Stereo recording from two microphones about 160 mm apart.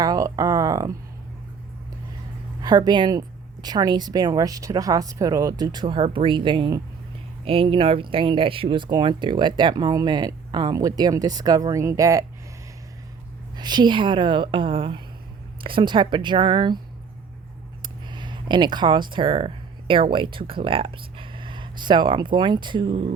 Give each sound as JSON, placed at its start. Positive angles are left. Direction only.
{"t": 0.0, "sound": "speech", "side_deg": -25}
{"t": 2.6, "sound": "speech", "side_deg": -25}
{"t": 13.6, "sound": "a woman's voice", "side_deg": -25}
{"t": 17.8, "sound": "a sound", "side_deg": -30}
{"t": 19.9, "sound": "speech", "side_deg": -30}